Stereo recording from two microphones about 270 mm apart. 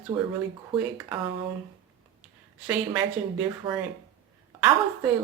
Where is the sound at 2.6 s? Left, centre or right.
Centre.